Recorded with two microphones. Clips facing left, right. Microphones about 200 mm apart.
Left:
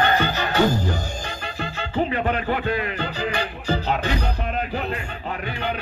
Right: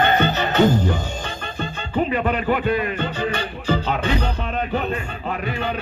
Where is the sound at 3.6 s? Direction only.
25° right (ahead or behind).